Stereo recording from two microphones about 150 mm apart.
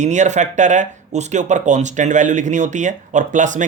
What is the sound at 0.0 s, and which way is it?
Speech, 50° right (ahead or behind).